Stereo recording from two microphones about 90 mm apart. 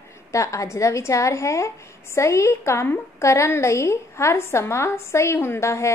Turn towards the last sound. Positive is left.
turn(degrees=30)  # may be behind; listen again after turning